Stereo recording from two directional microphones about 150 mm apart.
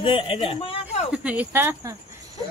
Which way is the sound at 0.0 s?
35° left (ahead or behind).